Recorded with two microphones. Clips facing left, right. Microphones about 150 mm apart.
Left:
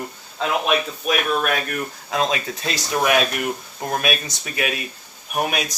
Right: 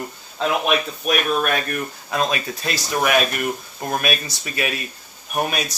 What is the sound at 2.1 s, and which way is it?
Speech, 20° left (ahead or behind).